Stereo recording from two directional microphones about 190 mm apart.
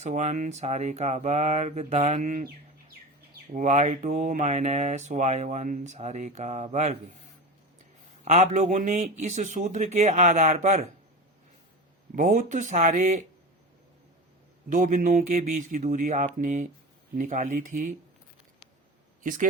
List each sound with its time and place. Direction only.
0.0 s speech: 40° right (ahead or behind)
3.5 s speech: 40° right (ahead or behind)
8.2 s speech: 35° right (ahead or behind)
12.1 s speech: 40° right (ahead or behind)
14.7 s speech: 40° right (ahead or behind)
19.2 s a man's voice: 45° right (ahead or behind)